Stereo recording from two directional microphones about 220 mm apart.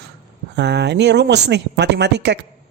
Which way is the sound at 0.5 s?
50° right (ahead or behind).